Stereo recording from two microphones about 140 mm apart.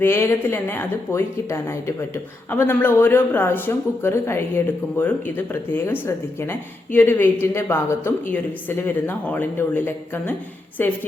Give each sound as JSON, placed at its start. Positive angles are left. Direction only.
{"t": 0.0, "sound": "speech", "side_deg": 20}